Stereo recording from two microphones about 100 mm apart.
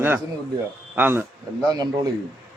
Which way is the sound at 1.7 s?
40° right (ahead or behind).